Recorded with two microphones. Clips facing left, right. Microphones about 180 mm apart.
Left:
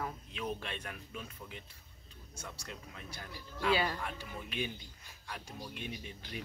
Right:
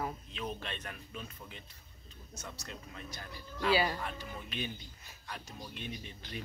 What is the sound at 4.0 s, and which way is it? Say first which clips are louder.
Speech: right 1 dB; 10° left (ahead or behind).